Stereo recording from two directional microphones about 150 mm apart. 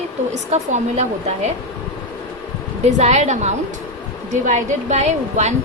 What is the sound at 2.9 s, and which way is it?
A woman's voice, 50° right (ahead or behind).